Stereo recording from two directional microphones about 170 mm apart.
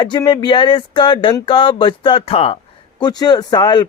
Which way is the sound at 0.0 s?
25° left (ahead or behind).